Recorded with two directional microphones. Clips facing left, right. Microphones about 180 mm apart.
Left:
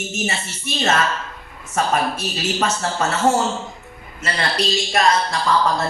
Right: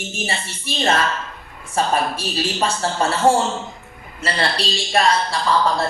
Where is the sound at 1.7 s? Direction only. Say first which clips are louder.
Even; 30° right (ahead or behind).